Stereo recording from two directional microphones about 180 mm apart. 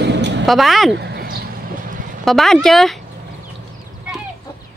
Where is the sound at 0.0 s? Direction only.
75° right (ahead or behind).